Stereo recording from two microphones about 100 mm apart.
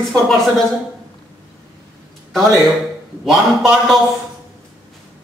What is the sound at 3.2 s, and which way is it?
Speech, 5° right (ahead or behind).